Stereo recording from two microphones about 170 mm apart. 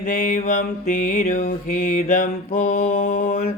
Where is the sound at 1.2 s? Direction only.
45° left (ahead or behind).